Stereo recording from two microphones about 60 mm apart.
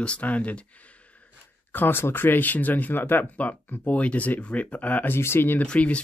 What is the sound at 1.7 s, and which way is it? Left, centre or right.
Speech, left.